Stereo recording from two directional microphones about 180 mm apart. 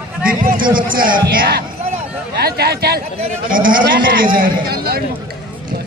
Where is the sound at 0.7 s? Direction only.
50° right (ahead or behind).